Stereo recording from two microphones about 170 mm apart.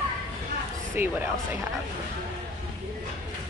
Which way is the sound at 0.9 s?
10° right (ahead or behind).